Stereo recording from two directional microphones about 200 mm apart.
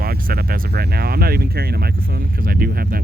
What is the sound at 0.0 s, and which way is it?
Speech, 45° right (ahead or behind).